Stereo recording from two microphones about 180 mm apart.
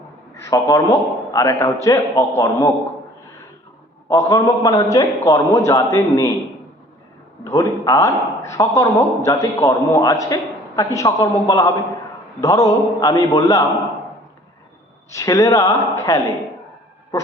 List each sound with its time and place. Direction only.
0.4 s a man's voice: 15° left (ahead or behind)
4.1 s a man's voice: 15° left (ahead or behind)
7.4 s a man's voice: 15° left (ahead or behind)
15.1 s a man's voice: 20° left (ahead or behind)
17.1 s dog: 15° left (ahead or behind)